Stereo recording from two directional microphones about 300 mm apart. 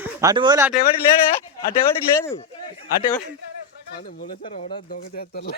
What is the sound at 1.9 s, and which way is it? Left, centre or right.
Speech, centre.